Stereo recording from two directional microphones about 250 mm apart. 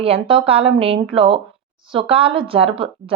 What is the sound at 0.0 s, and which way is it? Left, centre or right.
A woman's voice, right.